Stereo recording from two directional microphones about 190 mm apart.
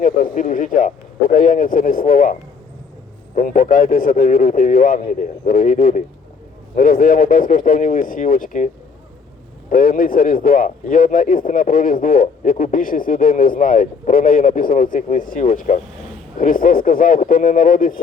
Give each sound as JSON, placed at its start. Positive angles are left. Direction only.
{"t": 0.0, "sound": "speech", "side_deg": 45}